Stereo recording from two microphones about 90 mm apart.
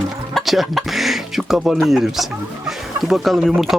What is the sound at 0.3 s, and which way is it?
Speech, centre (ahead or behind).